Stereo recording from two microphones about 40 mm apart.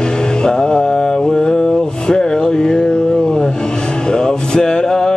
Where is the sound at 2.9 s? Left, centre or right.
Left.